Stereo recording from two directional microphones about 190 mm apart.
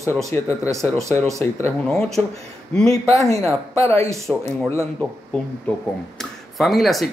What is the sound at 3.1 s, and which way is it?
Speech, 15° left (ahead or behind).